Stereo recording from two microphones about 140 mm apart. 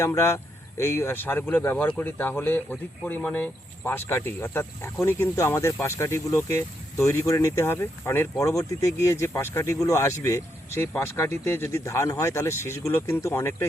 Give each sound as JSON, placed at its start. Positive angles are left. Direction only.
{"t": 0.0, "sound": "speech", "side_deg": 20}